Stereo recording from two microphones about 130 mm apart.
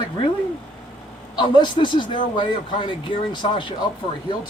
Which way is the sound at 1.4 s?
35° left (ahead or behind).